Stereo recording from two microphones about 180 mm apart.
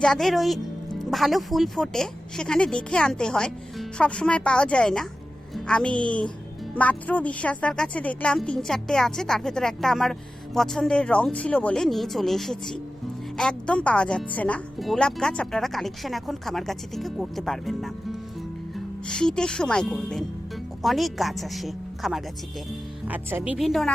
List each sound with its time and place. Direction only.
0.0 s a woman's voice: centre (ahead or behind)